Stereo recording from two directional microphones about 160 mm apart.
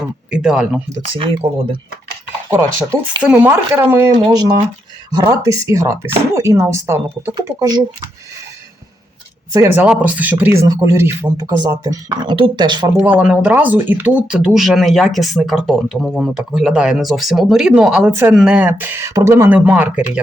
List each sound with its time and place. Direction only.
0.3 s speech: 5° right (ahead or behind)
1.0 s speech: 35° right (ahead or behind)
2.5 s speech: 20° right (ahead or behind)
9.5 s speech: 20° right (ahead or behind)
9.8 s speech: 10° right (ahead or behind); by 12.9 s 30° right (ahead or behind)
13.0 s speech: 10° right (ahead or behind)
18.1 s speech: 15° right (ahead or behind)